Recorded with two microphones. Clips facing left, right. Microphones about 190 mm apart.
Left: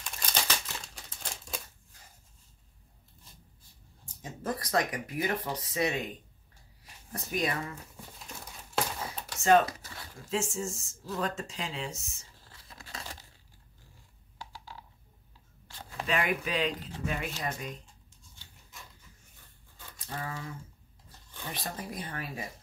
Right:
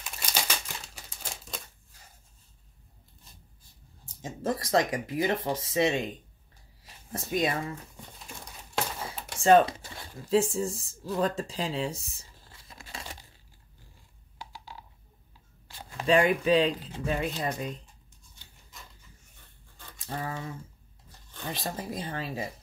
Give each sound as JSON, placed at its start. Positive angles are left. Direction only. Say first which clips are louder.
{"t": 0.0, "sound": "crumpling", "louder": "right 1 dB", "side_deg": -10}
{"t": 4.2, "sound": "speech", "louder": "right 4 dB", "side_deg": -25}
{"t": 6.8, "sound": "a sound", "louder": "right 4 dB", "side_deg": -25}
{"t": 8.2, "sound": "crumpling", "louder": "even", "side_deg": 0}
{"t": 9.2, "sound": "speech", "louder": "right 4 dB", "side_deg": -25}
{"t": 12.4, "sound": "a sound", "louder": "right 1 dB", "side_deg": -15}
{"t": 14.4, "sound": "a sound", "louder": "right 1 dB", "side_deg": -15}
{"t": 16.1, "sound": "speech", "louder": "right 9 dB", "side_deg": -30}
{"t": 20.1, "sound": "speech", "louder": "right 4 dB", "side_deg": -30}
{"t": 21.5, "sound": "speech", "louder": "right 4 dB", "side_deg": -25}